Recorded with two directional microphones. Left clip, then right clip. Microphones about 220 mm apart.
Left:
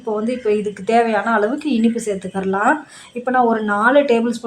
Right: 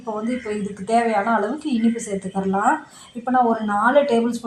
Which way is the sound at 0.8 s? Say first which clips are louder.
Left 2 dB; 25° left (ahead or behind).